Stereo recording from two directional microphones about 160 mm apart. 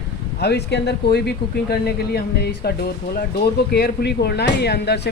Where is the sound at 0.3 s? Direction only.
90° left.